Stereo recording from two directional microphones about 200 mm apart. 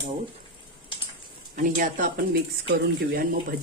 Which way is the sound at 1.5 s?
40° right (ahead or behind).